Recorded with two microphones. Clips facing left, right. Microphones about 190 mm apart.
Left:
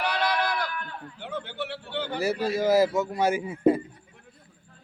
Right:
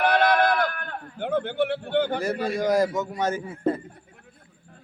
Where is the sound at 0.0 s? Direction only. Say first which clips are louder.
Right 7 dB; 55° right (ahead or behind).